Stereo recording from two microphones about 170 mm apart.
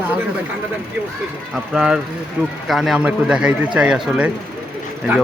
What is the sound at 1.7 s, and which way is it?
A man's voice, 5° right (ahead or behind).